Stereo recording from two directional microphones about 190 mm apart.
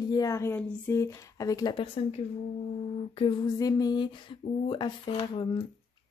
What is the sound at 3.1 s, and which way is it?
A woman's voice, 30° left (ahead or behind).